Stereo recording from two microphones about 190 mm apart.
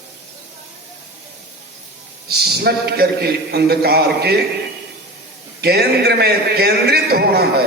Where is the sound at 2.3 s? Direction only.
55° right (ahead or behind).